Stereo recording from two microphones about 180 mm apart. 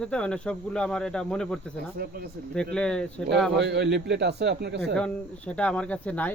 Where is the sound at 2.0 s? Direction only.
60° right (ahead or behind).